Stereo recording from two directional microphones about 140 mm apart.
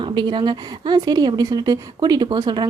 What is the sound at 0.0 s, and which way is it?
Speech, 35° right (ahead or behind).